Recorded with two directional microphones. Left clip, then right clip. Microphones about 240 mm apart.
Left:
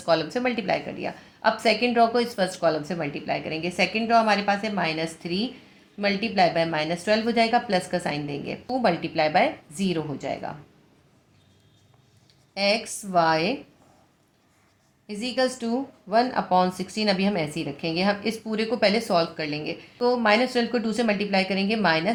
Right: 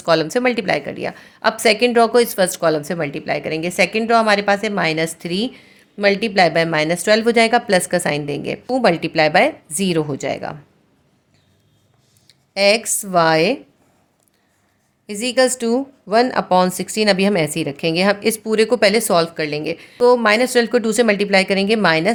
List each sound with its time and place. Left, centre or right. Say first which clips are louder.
0.0 s speech: right 7 dB; right
12.3 s speech: right 9 dB; right
15.0 s speech: right 9 dB; right